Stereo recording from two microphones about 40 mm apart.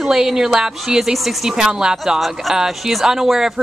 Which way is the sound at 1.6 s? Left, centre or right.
Centre.